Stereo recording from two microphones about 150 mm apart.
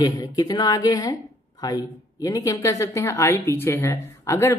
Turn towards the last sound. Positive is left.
turn(degrees=20)  # may be behind; listen again after turning